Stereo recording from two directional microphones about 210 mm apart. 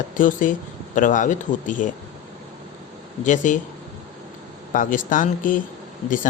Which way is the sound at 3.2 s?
35° left (ahead or behind).